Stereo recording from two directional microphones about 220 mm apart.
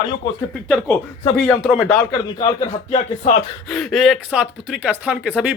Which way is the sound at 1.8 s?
20° left (ahead or behind).